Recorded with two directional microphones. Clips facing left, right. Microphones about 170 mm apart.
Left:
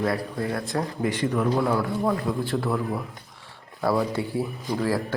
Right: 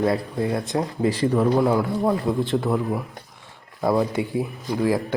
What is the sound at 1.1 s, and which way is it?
Speech, 35° right (ahead or behind).